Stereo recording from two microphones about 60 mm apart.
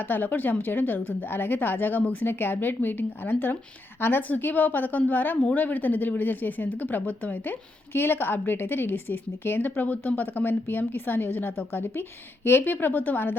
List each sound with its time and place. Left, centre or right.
0.1 s a woman's voice: left
7.9 s a woman's voice: left